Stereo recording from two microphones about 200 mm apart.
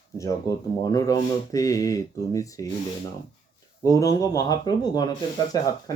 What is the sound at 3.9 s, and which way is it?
Speech, 15° left (ahead or behind).